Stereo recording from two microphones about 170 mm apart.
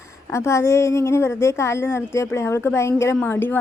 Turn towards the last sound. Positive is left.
turn(degrees=10)  # may be behind; listen again after turning